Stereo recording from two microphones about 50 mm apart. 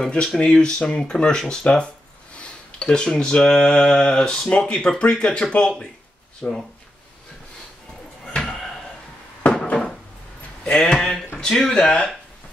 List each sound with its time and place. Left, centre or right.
0.0 s speech: centre
2.3 s a sound: centre
4.5 s speech: left
8.3 s a sound: centre
9.4 s wood: left
10.8 s speech: centre